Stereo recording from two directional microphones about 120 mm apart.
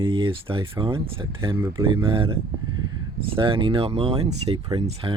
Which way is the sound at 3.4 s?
45° right (ahead or behind).